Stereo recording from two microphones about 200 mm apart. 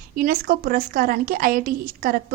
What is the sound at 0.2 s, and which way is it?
A woman's voice, 45° right (ahead or behind).